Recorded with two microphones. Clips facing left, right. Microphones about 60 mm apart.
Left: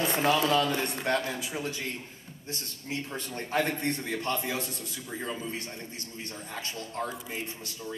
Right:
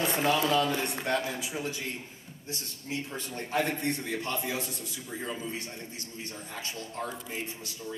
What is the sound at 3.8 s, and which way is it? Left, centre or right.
Speech, left.